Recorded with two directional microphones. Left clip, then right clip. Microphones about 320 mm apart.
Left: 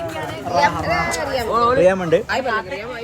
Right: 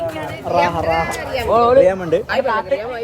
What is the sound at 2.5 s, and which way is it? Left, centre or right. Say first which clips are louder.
Speech: right 4 dB; right.